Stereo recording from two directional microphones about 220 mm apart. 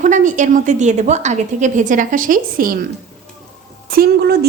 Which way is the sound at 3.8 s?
45° right (ahead or behind).